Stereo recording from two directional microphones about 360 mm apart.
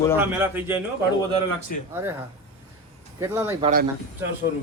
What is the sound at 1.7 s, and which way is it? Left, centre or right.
Speech, left.